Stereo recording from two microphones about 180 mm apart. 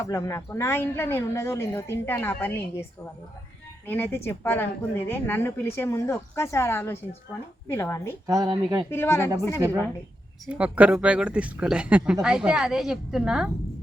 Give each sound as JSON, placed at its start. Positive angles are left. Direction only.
{"t": 0.0, "sound": "a woman's voice", "side_deg": 15}
{"t": 3.8, "sound": "a woman's voice", "side_deg": 10}
{"t": 8.3, "sound": "speech", "side_deg": -20}
{"t": 8.9, "sound": "a woman's voice", "side_deg": 15}
{"t": 10.4, "sound": "a woman's voice", "side_deg": -5}